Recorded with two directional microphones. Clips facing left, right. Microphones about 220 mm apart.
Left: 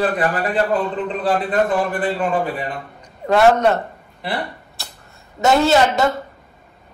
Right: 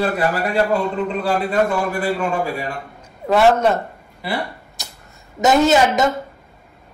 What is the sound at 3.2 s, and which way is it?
A man's voice, centre (ahead or behind).